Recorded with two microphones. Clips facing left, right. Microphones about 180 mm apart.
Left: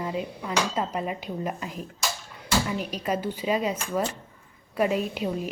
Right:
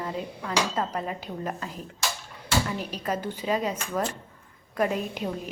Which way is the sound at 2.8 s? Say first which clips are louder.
Left 2 dB; 10° left (ahead or behind).